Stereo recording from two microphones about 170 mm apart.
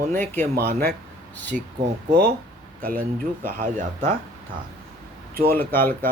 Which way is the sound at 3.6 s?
50° right (ahead or behind).